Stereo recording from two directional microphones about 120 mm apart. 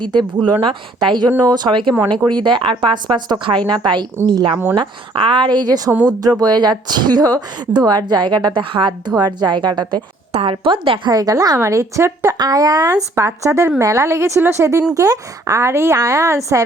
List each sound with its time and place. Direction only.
0.0 s a woman's voice: 40° right (ahead or behind)
10.3 s a woman's voice: 50° right (ahead or behind)
11.1 s speech: 30° right (ahead or behind)